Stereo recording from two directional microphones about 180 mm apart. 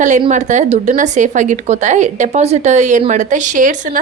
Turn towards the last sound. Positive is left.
turn(degrees=-45)  # may be behind; listen again after turning